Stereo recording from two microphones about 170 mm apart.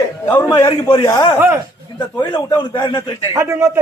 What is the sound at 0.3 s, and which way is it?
Speech, 15° left (ahead or behind).